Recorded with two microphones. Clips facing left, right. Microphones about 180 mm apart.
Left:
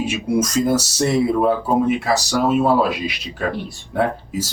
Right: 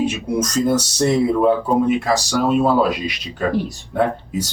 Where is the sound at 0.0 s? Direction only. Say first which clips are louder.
Even; 10° left (ahead or behind).